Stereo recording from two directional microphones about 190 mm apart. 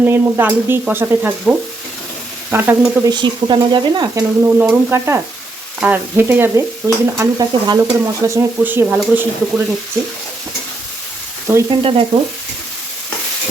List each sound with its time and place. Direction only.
0.0 s stir: 10° right (ahead or behind)
3.1 s stir: 25° right (ahead or behind)
11.8 s stir: 30° right (ahead or behind)